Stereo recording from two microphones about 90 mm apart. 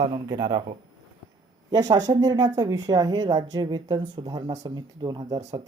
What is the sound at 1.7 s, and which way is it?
Speech, 45° right (ahead or behind).